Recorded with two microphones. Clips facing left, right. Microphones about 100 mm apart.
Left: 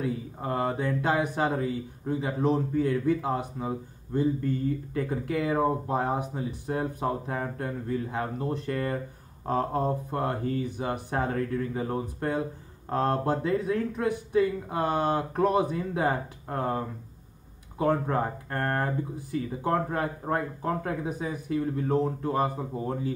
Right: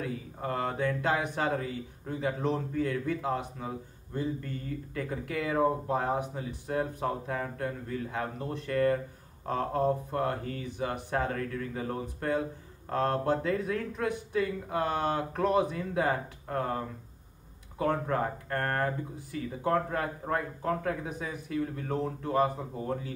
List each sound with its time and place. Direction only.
0.4 s a man's voice: 20° left (ahead or behind)